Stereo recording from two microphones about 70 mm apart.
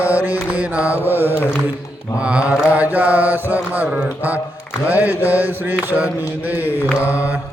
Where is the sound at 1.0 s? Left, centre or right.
Right.